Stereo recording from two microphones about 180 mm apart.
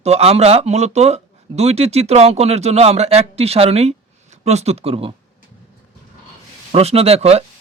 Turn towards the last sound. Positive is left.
turn(degrees=-35)  # may be behind; listen again after turning